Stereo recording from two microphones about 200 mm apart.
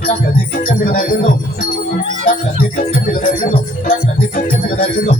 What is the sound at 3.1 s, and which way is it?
Music, 45° left (ahead or behind).